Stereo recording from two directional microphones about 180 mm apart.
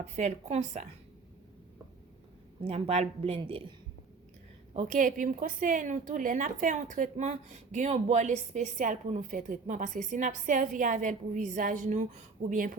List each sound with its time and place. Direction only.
0.0 s a woman's voice: 40° right (ahead or behind)
2.6 s a woman's voice: 35° right (ahead or behind)
4.7 s a woman's voice: 45° right (ahead or behind)